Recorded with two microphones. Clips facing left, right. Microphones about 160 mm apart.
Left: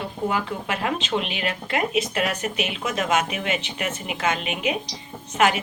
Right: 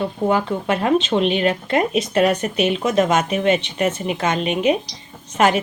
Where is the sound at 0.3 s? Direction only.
35° right (ahead or behind).